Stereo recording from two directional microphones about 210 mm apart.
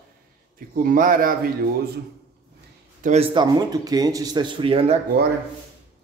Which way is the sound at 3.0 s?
30° right (ahead or behind).